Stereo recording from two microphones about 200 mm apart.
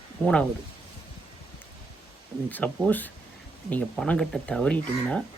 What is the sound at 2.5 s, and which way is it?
Speech, 10° left (ahead or behind).